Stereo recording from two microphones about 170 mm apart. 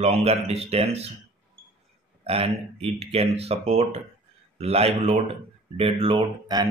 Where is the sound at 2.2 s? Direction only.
35° right (ahead or behind).